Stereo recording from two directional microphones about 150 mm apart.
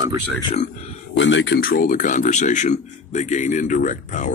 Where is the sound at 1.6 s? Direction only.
75° left (ahead or behind).